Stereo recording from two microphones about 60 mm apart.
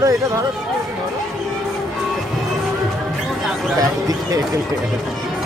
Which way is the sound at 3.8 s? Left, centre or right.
Right.